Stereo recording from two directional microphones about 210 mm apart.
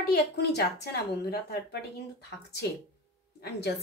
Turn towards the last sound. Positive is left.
turn(degrees=50)  # may be behind; listen again after turning